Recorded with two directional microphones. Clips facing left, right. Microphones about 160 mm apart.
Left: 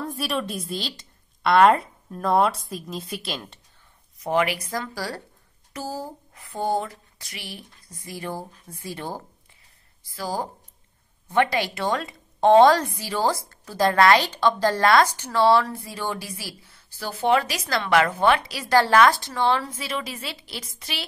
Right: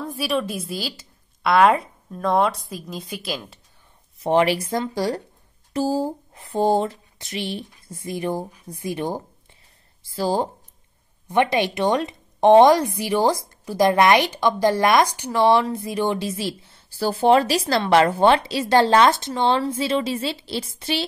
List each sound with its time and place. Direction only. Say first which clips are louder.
0.0 s a woman's voice: right 3 dB; centre (ahead or behind)
4.2 s a woman's voice: right 5 dB; 30° right (ahead or behind)
10.0 s a woman's voice: right 7 dB; 30° right (ahead or behind)